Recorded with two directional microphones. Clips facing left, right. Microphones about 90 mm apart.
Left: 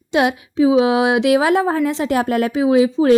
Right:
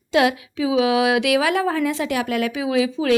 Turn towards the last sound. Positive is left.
turn(degrees=35)  # may be behind; listen again after turning